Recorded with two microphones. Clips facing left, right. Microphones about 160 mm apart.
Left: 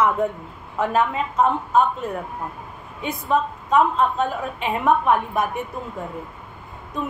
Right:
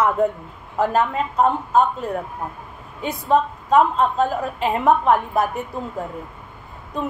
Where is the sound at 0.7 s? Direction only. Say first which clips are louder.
Right 1 dB; 35° right (ahead or behind).